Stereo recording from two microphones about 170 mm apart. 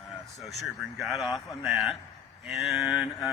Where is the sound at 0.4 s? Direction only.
Centre (ahead or behind).